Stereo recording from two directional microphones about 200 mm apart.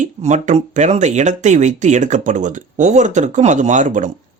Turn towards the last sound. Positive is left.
turn(degrees=-40)  # may be behind; listen again after turning